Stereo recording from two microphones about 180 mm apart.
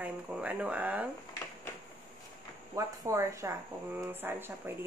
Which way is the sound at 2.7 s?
15° right (ahead or behind).